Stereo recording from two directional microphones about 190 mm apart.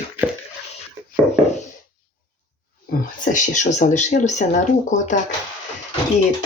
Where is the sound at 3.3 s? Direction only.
40° left (ahead or behind).